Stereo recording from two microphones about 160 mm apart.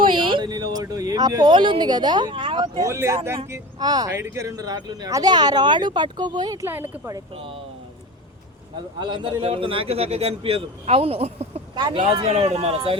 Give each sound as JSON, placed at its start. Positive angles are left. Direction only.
{"t": 0.0, "sound": "speech", "side_deg": -30}
{"t": 7.3, "sound": "a man's voice", "side_deg": -35}
{"t": 9.0, "sound": "a man's voice", "side_deg": -30}
{"t": 11.7, "sound": "speech", "side_deg": -30}
{"t": 12.2, "sound": "a man's voice", "side_deg": -40}